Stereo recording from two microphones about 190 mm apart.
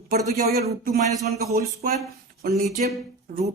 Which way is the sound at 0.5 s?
50° right (ahead or behind).